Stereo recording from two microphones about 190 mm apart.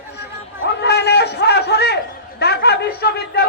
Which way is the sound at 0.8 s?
60° left (ahead or behind).